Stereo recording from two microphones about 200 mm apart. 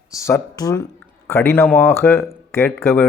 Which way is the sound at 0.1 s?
15° left (ahead or behind).